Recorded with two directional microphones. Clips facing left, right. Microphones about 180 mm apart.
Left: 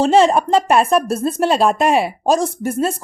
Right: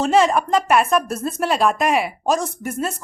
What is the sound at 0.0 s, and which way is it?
Speech, 30° left (ahead or behind).